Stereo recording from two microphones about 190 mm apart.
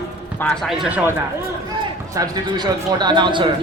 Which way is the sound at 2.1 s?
20° right (ahead or behind).